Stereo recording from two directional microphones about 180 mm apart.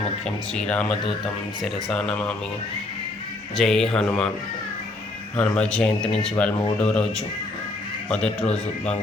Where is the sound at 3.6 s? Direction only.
5° left (ahead or behind).